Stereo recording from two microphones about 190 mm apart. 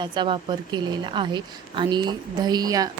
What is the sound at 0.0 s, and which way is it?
A woman's voice, 25° right (ahead or behind).